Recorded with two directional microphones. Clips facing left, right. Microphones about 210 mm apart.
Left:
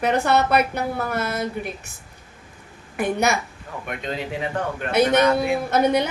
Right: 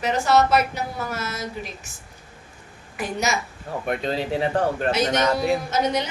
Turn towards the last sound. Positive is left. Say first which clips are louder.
# left 4 dB
turn(degrees=55)  # may be behind; listen again after turning